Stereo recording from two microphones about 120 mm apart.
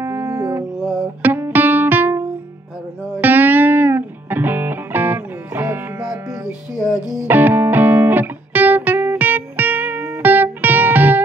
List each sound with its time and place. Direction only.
0.0 s music: 25° right (ahead or behind)
1.2 s music: 15° right (ahead or behind)
6.4 s music: 5° right (ahead or behind)
7.2 s music: 15° right (ahead or behind)